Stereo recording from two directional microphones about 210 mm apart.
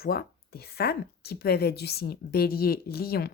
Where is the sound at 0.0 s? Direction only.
45° left (ahead or behind).